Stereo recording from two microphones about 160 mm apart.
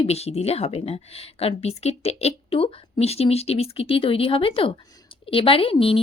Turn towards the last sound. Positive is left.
turn(degrees=35)  # may be behind; listen again after turning